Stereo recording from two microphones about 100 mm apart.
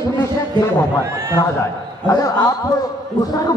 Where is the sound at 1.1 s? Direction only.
25° right (ahead or behind).